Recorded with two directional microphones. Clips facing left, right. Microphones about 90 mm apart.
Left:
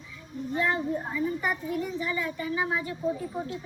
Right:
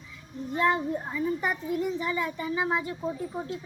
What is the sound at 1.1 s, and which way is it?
Speech, 20° right (ahead or behind).